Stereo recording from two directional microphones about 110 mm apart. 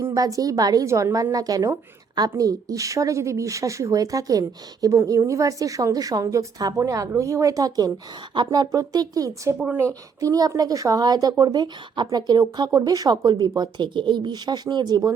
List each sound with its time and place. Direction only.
0.0 s speech: 30° right (ahead or behind)
9.6 s speech: 15° right (ahead or behind)
10.2 s speech: 35° right (ahead or behind)